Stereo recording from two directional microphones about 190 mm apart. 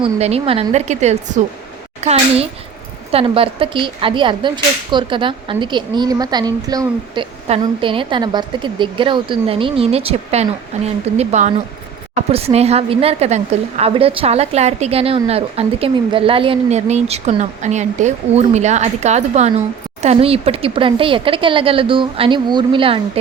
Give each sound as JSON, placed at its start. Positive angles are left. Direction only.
{"t": 0.0, "sound": "a woman's voice", "side_deg": -30}
{"t": 7.4, "sound": "a woman's voice", "side_deg": -30}